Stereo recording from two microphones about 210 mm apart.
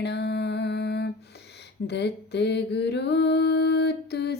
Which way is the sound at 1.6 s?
55° left (ahead or behind).